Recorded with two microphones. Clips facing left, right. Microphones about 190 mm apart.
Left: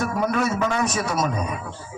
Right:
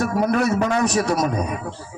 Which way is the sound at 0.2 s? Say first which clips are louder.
Right 3 dB; 35° right (ahead or behind).